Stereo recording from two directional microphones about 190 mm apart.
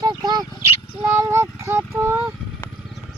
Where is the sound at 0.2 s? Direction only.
20° right (ahead or behind).